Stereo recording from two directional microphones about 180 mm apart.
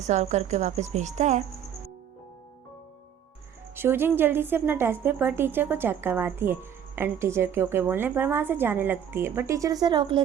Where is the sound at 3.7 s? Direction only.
10° right (ahead or behind).